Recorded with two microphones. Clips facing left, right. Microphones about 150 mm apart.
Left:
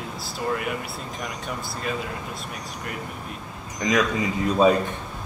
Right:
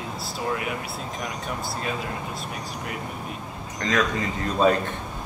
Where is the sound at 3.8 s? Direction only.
10° left (ahead or behind).